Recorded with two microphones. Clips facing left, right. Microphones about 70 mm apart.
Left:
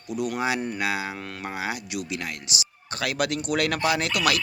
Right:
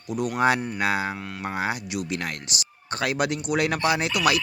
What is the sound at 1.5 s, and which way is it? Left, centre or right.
Speech, right.